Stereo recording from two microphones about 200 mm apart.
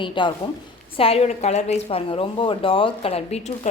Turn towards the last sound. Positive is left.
turn(degrees=30)  # may be behind; listen again after turning